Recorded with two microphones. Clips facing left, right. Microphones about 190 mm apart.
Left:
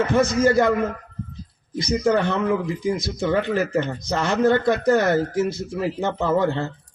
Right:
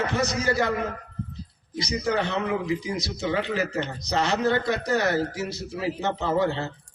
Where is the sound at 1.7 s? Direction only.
50° left (ahead or behind).